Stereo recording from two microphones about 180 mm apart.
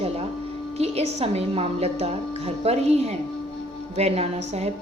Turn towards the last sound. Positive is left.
turn(degrees=-35)  # may be behind; listen again after turning